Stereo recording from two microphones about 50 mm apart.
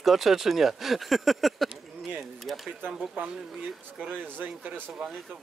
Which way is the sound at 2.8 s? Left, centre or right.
Right.